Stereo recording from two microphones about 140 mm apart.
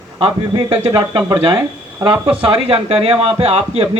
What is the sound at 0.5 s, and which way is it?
Speech, 40° right (ahead or behind).